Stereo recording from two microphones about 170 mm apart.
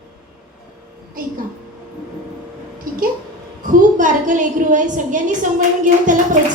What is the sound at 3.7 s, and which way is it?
A woman's voice, 50° right (ahead or behind).